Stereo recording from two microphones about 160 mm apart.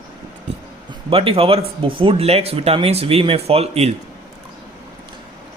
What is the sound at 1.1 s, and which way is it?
Speech, 35° right (ahead or behind).